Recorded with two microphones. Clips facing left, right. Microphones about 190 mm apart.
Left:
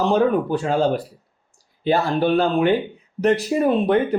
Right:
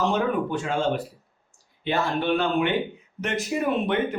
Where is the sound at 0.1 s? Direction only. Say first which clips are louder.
Left 6 dB; 35° left (ahead or behind).